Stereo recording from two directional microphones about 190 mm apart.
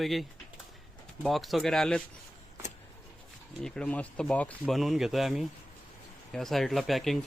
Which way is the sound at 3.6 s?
5° left (ahead or behind).